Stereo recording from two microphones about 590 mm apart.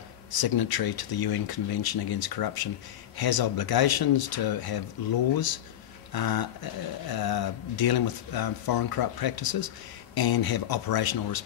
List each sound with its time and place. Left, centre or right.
0.3 s speech: left